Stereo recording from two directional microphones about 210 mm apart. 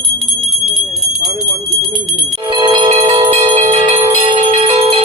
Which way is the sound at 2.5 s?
20° right (ahead or behind).